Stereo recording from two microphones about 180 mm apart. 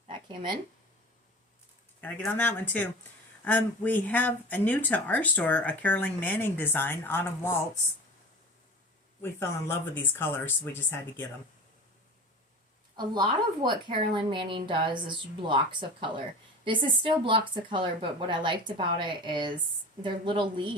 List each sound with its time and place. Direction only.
2.0 s speech: 10° left (ahead or behind)
9.2 s speech: 10° left (ahead or behind)
13.1 s a woman's voice: 25° right (ahead or behind)